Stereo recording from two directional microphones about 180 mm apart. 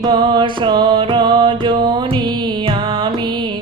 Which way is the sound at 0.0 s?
25° right (ahead or behind).